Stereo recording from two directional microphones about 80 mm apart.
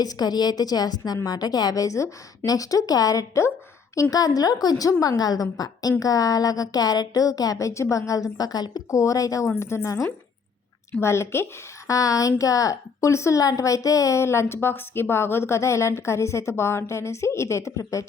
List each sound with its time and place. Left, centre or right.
0.0 s a woman's voice: left
8.9 s a woman's voice: left
9.6 s a woman's voice: left
11.9 s a woman's voice: left